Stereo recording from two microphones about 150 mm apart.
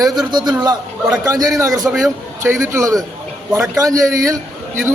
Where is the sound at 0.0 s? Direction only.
25° right (ahead or behind).